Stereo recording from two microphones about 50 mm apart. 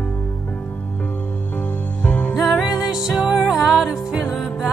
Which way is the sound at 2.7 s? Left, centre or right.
Centre.